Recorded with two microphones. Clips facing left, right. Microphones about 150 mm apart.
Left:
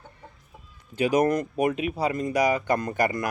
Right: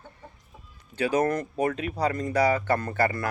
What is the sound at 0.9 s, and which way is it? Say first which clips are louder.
A man's voice: left 3 dB; 15° left (ahead or behind).